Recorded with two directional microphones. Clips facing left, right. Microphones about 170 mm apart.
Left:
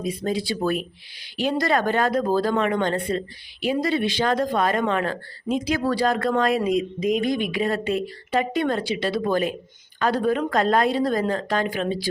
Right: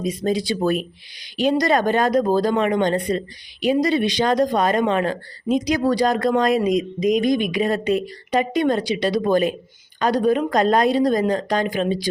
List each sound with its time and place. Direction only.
0.0 s speech: 20° right (ahead or behind)